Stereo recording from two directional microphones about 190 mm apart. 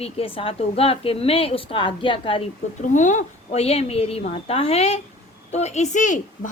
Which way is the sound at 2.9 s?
40° left (ahead or behind).